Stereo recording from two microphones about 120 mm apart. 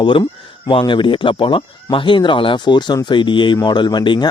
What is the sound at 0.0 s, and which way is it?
Speech, 45° left (ahead or behind).